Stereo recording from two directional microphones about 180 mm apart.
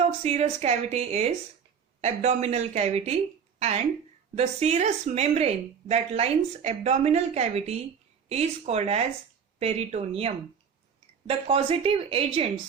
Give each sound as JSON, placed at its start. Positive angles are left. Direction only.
{"t": 0.2, "sound": "a woman's voice", "side_deg": -35}